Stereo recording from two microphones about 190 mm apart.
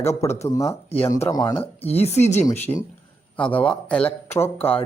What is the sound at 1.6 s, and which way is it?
Speech, 30° left (ahead or behind).